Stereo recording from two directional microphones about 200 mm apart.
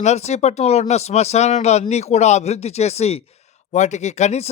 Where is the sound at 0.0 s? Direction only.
35° left (ahead or behind).